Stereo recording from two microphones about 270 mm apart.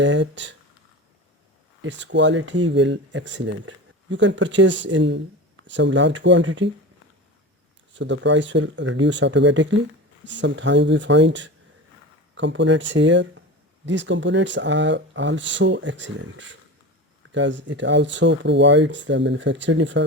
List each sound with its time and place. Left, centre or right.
0.0 s speech: right
1.8 s speech: right
7.9 s speech: right